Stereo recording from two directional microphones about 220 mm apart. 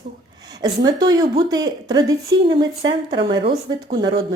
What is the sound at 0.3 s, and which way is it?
Speech, 15° right (ahead or behind).